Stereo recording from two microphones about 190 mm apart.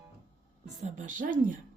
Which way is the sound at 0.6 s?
40° right (ahead or behind).